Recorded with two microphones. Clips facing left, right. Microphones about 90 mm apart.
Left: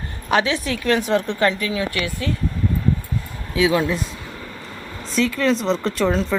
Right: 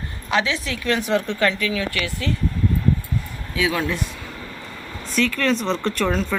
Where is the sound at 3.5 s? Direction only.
20° left (ahead or behind).